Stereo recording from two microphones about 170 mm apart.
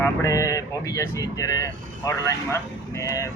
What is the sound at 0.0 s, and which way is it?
Speech, 15° left (ahead or behind).